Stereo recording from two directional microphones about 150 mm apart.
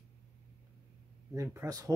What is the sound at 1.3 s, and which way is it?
Speech, 20° right (ahead or behind).